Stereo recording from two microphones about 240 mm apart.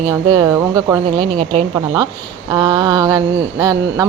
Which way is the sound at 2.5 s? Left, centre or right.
Centre.